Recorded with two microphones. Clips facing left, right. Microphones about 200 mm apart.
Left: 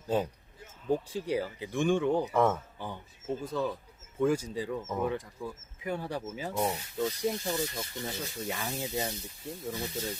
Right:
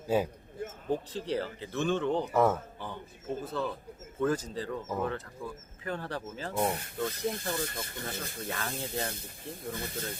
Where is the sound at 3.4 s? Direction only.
15° left (ahead or behind).